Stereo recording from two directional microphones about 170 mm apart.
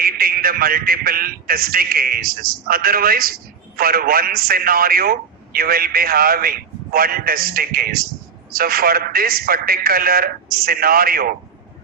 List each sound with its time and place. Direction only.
0.0 s a man's voice: 60° right (ahead or behind)